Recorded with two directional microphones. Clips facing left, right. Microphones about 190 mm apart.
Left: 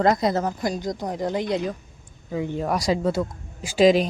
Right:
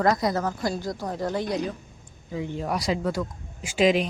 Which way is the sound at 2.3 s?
50° left (ahead or behind).